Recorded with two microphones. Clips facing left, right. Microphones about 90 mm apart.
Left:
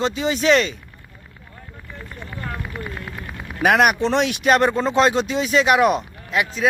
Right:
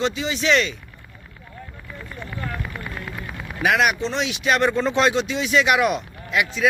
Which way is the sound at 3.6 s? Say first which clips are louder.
Left 3 dB; 50° left (ahead or behind).